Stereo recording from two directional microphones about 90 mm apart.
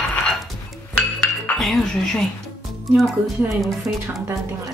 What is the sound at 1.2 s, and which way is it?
Dishes, 5° left (ahead or behind).